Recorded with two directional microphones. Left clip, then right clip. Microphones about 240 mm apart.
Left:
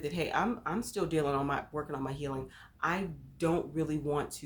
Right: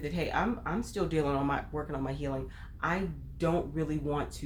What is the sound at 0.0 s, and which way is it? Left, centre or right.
Speech, left.